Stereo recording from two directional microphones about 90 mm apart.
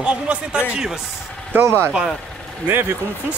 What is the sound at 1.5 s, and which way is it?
Speech, 25° right (ahead or behind).